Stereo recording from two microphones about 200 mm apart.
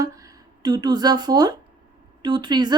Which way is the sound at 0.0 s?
15° right (ahead or behind).